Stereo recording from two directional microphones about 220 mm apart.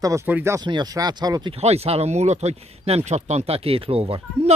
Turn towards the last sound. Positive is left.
turn(degrees=-25)  # may be behind; listen again after turning